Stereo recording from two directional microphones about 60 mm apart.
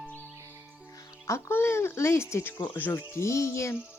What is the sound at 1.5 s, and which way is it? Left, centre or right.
Speech, left.